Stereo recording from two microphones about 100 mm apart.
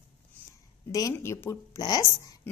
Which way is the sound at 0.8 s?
35° left (ahead or behind).